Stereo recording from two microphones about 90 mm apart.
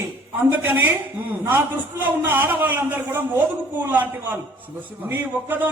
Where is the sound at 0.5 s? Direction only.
20° right (ahead or behind).